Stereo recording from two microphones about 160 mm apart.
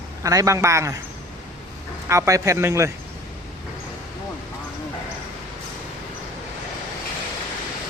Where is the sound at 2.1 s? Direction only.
20° right (ahead or behind).